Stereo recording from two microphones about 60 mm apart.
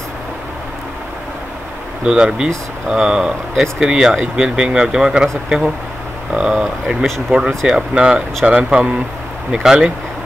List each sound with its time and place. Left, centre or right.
2.0 s speech: centre
6.3 s speech: centre